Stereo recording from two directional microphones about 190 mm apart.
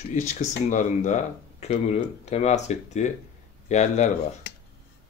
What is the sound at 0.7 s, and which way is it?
Speech, 40° left (ahead or behind).